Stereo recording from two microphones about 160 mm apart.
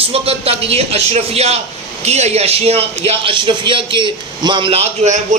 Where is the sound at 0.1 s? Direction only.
40° right (ahead or behind).